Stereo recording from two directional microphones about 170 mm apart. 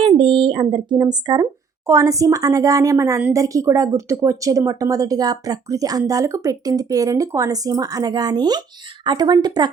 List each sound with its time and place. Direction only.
0.0 s a woman's voice: 30° right (ahead or behind)